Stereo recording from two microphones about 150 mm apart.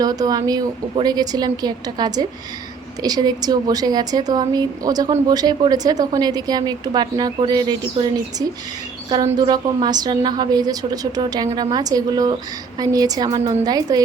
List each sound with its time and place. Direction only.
0.0 s a woman's voice: 25° right (ahead or behind)